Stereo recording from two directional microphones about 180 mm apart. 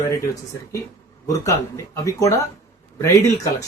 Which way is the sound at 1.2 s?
15° left (ahead or behind).